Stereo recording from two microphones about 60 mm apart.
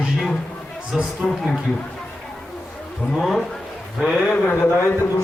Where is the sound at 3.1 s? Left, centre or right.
Centre.